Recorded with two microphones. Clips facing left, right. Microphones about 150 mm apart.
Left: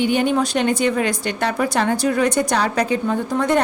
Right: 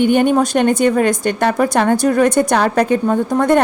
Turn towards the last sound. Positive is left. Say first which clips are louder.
# right 5 dB
turn(degrees=-50)  # may be behind; listen again after turning